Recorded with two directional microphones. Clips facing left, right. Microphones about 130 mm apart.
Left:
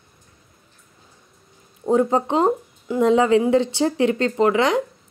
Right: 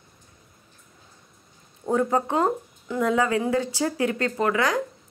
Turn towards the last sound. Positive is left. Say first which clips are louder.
# left 5 dB
turn(degrees=25)  # may be behind; listen again after turning